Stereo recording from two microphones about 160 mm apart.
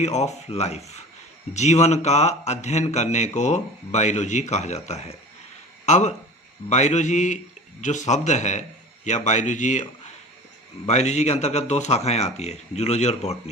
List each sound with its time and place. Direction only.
0.0 s speech: 45° left (ahead or behind)
10.8 s speech: 45° left (ahead or behind)